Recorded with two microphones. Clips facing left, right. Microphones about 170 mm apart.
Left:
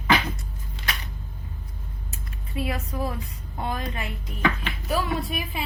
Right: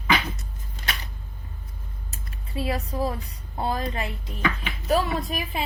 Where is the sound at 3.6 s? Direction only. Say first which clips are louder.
Right 3 dB; 30° right (ahead or behind).